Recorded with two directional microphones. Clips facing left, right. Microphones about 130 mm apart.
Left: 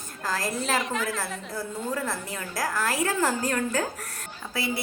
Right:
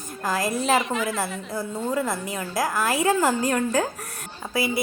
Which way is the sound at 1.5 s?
20° right (ahead or behind).